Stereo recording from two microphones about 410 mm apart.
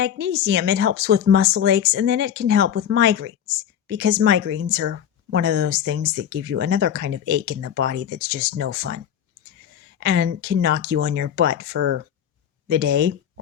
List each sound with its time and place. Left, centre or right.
0.0 s speech: right
10.0 s speech: right